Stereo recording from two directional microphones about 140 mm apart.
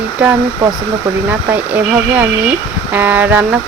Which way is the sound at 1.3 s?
10° right (ahead or behind).